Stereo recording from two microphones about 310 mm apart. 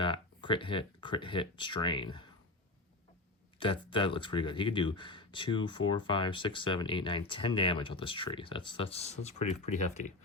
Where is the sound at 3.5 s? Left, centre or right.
Centre.